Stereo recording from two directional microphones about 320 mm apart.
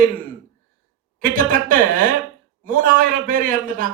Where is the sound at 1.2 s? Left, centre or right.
Right.